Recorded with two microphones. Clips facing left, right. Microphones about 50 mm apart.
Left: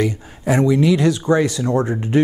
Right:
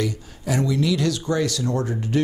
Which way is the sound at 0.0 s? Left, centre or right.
Left.